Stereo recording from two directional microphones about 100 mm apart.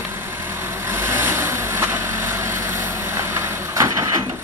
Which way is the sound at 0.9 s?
25° right (ahead or behind).